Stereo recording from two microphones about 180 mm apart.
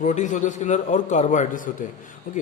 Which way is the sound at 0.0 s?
45° left (ahead or behind).